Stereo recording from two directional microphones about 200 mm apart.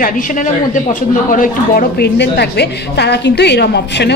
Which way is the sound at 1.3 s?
45° left (ahead or behind).